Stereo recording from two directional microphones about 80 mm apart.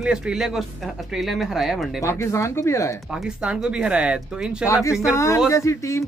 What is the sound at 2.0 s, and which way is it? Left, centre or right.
Speech, left.